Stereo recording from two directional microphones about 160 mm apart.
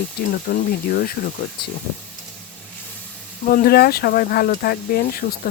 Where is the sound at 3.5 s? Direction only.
70° left (ahead or behind).